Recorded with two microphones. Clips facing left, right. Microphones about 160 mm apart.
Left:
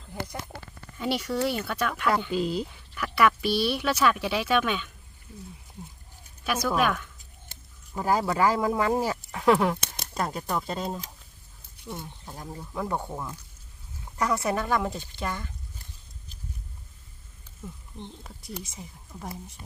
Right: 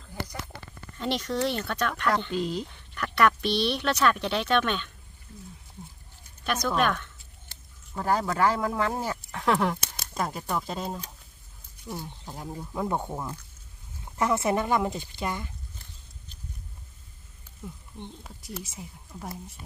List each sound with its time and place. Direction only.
0.9 s speech: 5° left (ahead or behind)
6.4 s speech: 5° left (ahead or behind)
11.9 s speech: 15° right (ahead or behind)
18.2 s speech: 5° right (ahead or behind)